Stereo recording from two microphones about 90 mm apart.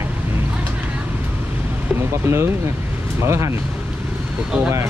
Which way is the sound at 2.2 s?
25° right (ahead or behind).